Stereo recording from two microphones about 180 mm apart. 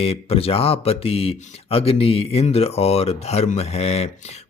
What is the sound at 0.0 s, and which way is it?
Speech, 35° left (ahead or behind).